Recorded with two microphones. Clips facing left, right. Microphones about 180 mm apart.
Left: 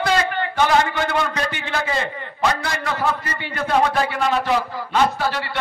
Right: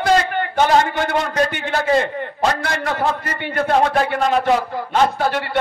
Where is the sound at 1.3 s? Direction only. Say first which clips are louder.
Right 5 dB; 50° right (ahead or behind).